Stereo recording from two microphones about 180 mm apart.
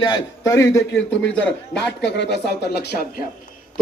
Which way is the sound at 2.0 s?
70° left (ahead or behind).